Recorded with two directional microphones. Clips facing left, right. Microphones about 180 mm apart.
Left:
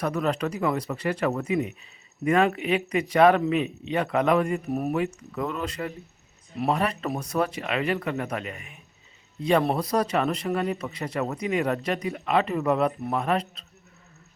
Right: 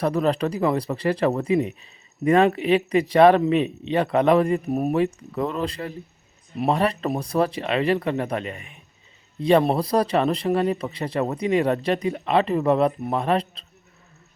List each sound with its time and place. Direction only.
0.0 s speech: 30° right (ahead or behind)
4.9 s speech: 35° right (ahead or behind)